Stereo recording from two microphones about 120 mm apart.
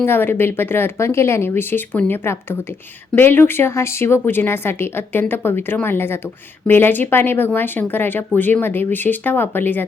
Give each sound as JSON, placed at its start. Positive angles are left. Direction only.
{"t": 0.0, "sound": "a woman's voice", "side_deg": 20}